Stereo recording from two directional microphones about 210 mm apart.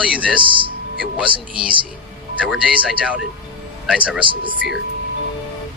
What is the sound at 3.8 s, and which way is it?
Speech, 5° right (ahead or behind).